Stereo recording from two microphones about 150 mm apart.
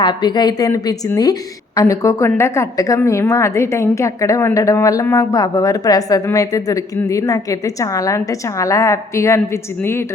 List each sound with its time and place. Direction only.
0.0 s a woman's voice: 30° left (ahead or behind)